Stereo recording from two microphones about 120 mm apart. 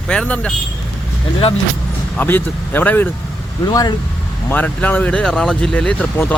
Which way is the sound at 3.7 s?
30° left (ahead or behind).